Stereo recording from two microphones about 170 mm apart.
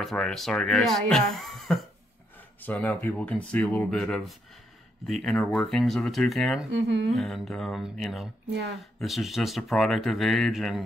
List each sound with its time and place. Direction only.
0.0 s speech: centre (ahead or behind)
6.7 s speech: 90° right
7.2 s speech: centre (ahead or behind)